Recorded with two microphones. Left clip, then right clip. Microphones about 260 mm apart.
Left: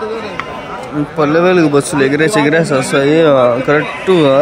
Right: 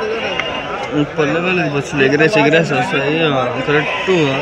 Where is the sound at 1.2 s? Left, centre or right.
Centre.